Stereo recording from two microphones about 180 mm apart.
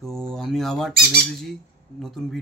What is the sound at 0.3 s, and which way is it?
Speech, centre (ahead or behind).